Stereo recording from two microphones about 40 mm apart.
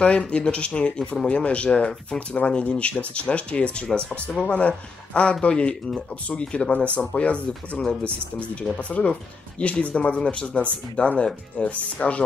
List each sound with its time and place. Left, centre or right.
0.0 s speech: left
8.7 s speech: left